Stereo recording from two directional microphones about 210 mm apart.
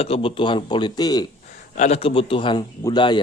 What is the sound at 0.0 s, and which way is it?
Speech, 25° left (ahead or behind).